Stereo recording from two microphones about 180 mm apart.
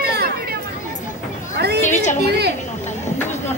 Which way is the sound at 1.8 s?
40° left (ahead or behind).